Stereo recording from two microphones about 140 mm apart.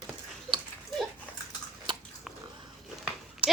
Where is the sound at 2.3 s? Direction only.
Centre (ahead or behind).